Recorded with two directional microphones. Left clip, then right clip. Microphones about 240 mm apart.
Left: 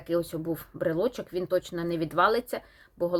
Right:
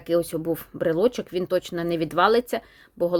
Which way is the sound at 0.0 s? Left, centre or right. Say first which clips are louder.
Right 6 dB; right.